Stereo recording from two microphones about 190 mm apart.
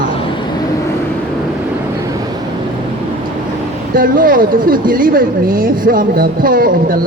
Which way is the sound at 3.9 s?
50° right (ahead or behind).